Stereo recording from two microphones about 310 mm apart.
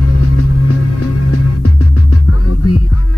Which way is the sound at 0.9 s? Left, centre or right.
Left.